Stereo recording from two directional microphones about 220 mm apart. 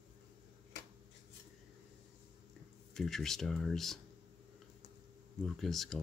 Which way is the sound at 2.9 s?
Centre (ahead or behind).